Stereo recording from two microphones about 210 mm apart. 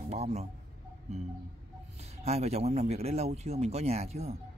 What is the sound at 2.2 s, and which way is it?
Speech, 30° right (ahead or behind).